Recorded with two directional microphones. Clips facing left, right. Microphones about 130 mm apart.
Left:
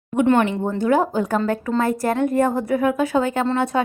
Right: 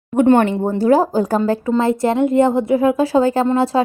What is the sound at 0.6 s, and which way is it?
Speech, 35° right (ahead or behind).